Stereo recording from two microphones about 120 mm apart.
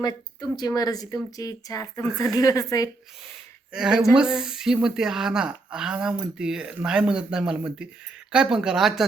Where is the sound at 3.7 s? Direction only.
5° right (ahead or behind).